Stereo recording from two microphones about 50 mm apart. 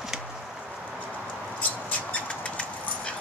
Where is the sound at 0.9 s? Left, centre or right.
Left.